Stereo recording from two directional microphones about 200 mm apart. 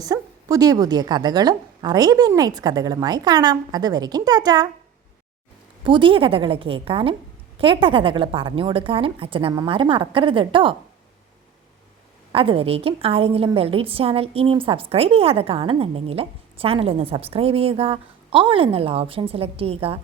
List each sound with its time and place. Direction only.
0.0 s a woman's voice: 15° right (ahead or behind)
5.8 s a woman's voice: 25° right (ahead or behind)
12.3 s a woman's voice: 25° right (ahead or behind)